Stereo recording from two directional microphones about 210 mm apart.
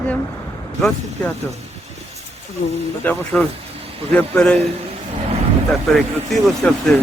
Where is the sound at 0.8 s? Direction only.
5° left (ahead or behind).